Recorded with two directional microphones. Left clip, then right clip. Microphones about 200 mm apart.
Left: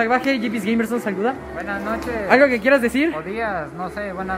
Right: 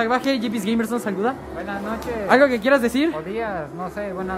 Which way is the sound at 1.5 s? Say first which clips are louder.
Left 3 dB; 10° right (ahead or behind).